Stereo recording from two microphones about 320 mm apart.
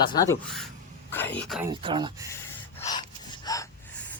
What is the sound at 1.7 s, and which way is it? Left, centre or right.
Speech, centre.